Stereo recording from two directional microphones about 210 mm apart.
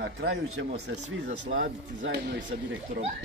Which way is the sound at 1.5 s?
70° right (ahead or behind).